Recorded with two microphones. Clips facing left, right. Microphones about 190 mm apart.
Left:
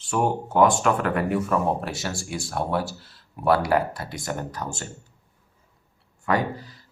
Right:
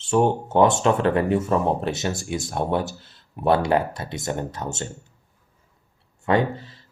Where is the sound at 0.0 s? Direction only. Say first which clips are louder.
Right 4 dB; 25° right (ahead or behind).